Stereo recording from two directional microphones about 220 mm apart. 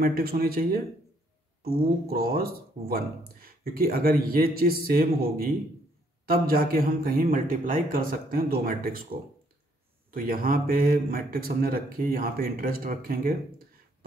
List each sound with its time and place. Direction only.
0.0 s speech: 40° right (ahead or behind)
10.1 s speech: 40° right (ahead or behind)